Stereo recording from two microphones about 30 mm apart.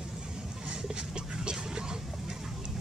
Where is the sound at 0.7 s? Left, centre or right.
Right.